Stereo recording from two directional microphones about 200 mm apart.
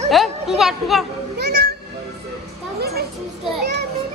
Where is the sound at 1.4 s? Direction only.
55° right (ahead or behind).